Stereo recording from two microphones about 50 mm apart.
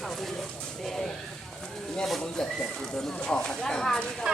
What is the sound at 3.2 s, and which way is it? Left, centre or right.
Speech, centre.